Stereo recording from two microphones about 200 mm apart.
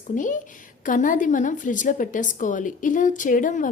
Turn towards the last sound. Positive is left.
turn(degrees=40)  # may be behind; listen again after turning